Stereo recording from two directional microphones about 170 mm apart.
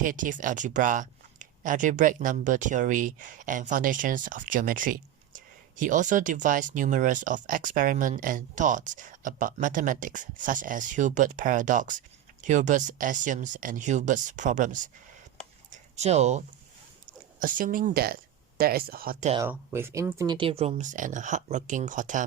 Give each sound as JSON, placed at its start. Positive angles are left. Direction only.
{"t": 0.0, "sound": "speech", "side_deg": -50}
{"t": 15.7, "sound": "a sound", "side_deg": -40}
{"t": 17.4, "sound": "speech", "side_deg": -55}
{"t": 19.5, "sound": "speech", "side_deg": -15}